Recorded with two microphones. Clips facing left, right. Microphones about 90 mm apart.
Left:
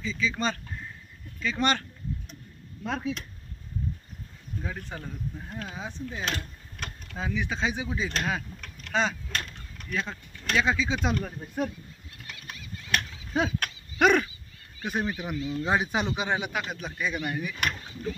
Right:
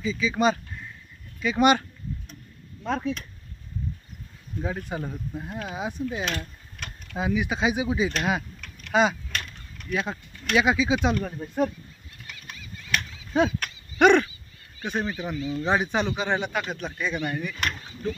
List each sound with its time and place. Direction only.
0.0 s speech: 15° right (ahead or behind)
2.8 s speech: 5° left (ahead or behind)
4.6 s speech: 20° right (ahead or behind)
6.2 s a sound: 30° left (ahead or behind)
7.2 s speech: 10° right (ahead or behind)
11.2 s speech: centre (ahead or behind)
13.9 s a sound: centre (ahead or behind)
14.8 s speech: 5° left (ahead or behind)